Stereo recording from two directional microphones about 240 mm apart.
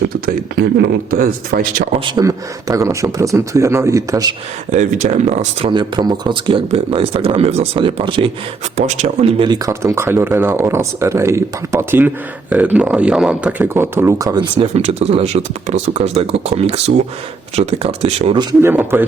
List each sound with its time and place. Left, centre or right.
0.5 s speech: right
2.0 s speech: centre
4.7 s speech: right; by 14.4 s centre
14.7 s speech: right
18.6 s speech: centre